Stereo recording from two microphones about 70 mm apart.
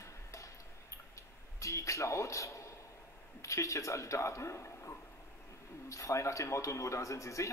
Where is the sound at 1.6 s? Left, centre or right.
Left.